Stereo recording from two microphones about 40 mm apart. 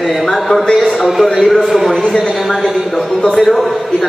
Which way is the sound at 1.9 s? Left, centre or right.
Left.